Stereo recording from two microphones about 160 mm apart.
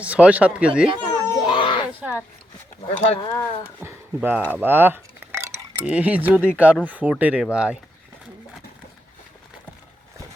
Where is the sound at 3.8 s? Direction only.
10° right (ahead or behind).